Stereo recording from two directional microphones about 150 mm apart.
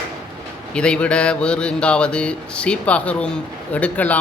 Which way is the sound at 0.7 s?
5° left (ahead or behind).